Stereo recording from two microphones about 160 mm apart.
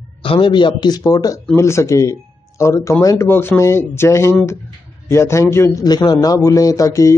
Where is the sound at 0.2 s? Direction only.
35° left (ahead or behind).